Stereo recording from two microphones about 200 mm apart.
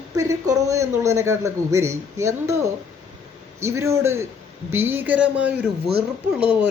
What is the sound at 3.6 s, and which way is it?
Speech, 15° right (ahead or behind).